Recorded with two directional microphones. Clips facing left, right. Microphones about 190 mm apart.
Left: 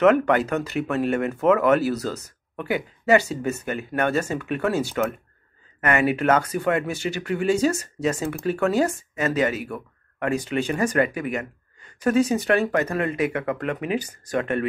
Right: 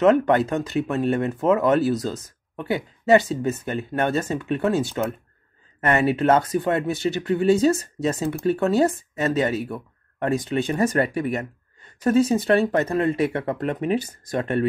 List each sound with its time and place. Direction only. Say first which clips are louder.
0.0 s speech: right 1 dB; 25° right (ahead or behind)